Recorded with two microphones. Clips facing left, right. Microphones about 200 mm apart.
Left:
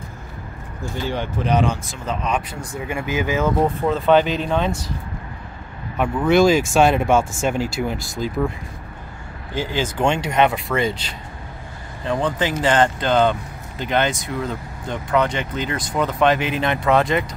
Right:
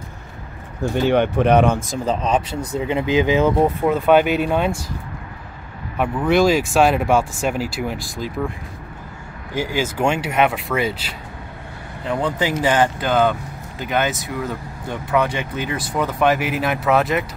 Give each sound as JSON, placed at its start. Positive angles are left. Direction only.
{"t": 1.0, "sound": "speech", "side_deg": -65}
{"t": 2.0, "sound": "speech", "side_deg": -30}
{"t": 5.9, "sound": "speech", "side_deg": 0}
{"t": 9.5, "sound": "speech", "side_deg": -10}